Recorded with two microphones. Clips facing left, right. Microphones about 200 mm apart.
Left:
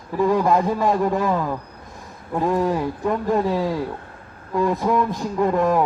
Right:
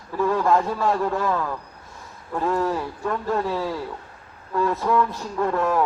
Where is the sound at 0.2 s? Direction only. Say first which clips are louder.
Left 2 dB; 15° left (ahead or behind).